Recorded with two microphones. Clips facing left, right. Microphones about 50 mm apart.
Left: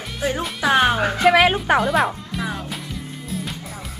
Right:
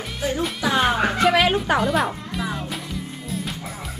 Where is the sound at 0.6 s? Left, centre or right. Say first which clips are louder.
Left 5 dB; left.